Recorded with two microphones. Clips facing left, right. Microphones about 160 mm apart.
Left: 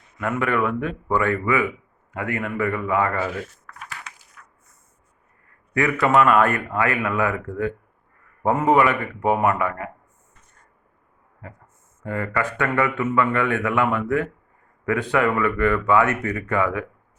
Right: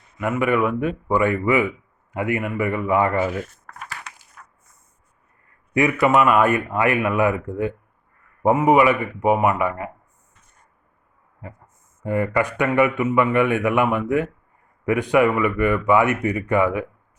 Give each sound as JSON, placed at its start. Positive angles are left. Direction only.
{"t": 0.2, "sound": "a man's voice", "side_deg": -10}
{"t": 3.3, "sound": "speech", "side_deg": -45}
{"t": 5.7, "sound": "a man's voice", "side_deg": -15}
{"t": 12.0, "sound": "a man's voice", "side_deg": -15}